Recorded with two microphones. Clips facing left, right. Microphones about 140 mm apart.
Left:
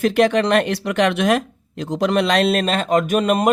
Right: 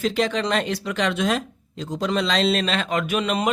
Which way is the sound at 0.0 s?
60° left (ahead or behind).